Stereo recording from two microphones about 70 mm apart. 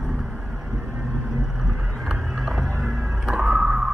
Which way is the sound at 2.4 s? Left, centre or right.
Centre.